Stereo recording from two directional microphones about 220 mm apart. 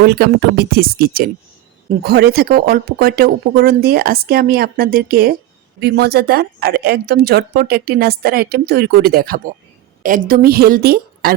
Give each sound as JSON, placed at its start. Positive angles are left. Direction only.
{"t": 0.0, "sound": "speech", "side_deg": -45}